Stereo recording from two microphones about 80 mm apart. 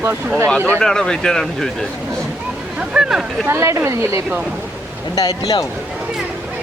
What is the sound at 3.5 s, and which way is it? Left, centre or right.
Speech, right.